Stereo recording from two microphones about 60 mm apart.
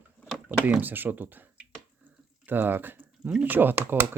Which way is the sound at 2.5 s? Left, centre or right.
Right.